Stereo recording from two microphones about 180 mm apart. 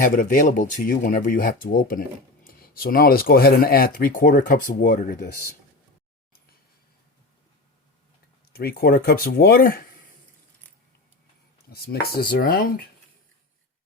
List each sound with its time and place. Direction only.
0.0 s speech: 45° left (ahead or behind)
8.5 s speech: 55° left (ahead or behind)
11.7 s speech: 60° left (ahead or behind)